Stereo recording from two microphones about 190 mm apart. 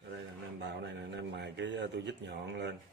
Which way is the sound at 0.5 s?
65° right (ahead or behind).